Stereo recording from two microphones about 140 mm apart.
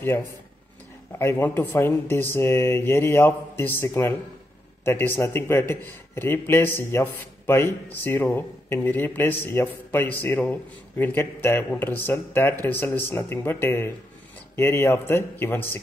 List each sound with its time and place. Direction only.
1.1 s a man's voice: 15° left (ahead or behind)